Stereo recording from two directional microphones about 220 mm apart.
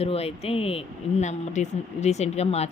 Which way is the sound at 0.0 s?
25° left (ahead or behind).